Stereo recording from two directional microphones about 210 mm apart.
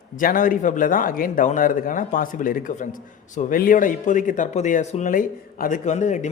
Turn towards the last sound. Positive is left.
turn(degrees=35)  # may be behind; listen again after turning